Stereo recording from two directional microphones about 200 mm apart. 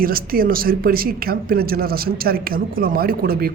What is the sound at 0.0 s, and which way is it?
A man's voice, 45° right (ahead or behind).